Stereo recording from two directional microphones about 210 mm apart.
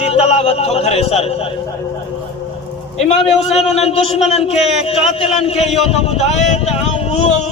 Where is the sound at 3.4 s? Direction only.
30° left (ahead or behind).